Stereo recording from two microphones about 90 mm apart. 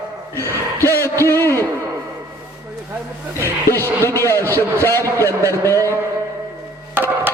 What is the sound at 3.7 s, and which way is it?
A man's voice, 30° left (ahead or behind).